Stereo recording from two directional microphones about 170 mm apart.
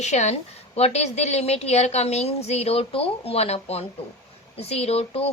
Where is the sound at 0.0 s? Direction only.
40° left (ahead or behind).